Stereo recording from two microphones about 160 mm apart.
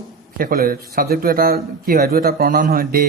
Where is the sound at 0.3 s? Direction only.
65° right (ahead or behind).